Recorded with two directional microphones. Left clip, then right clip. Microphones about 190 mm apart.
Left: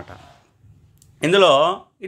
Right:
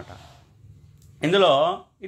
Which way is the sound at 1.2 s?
25° left (ahead or behind).